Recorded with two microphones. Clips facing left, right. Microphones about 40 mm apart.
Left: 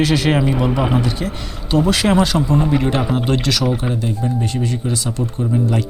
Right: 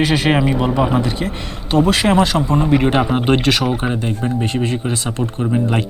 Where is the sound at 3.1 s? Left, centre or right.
Right.